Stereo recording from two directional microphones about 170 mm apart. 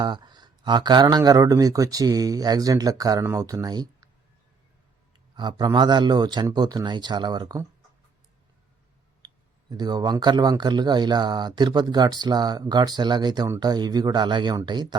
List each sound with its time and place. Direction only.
0.0 s speech: 25° right (ahead or behind)
5.4 s speech: 25° right (ahead or behind)
9.2 s speech: 25° right (ahead or behind)